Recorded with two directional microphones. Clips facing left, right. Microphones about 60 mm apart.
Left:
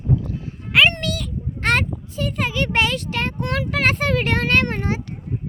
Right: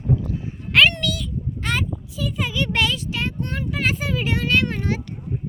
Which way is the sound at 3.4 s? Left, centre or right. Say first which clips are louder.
Left 4 dB; left.